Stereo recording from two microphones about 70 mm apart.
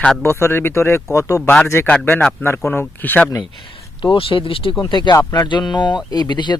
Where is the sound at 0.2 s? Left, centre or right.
Left.